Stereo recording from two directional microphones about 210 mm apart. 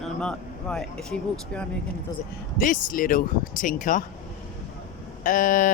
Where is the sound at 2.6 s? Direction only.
40° left (ahead or behind).